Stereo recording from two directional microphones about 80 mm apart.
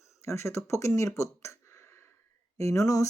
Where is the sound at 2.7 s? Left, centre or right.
Left.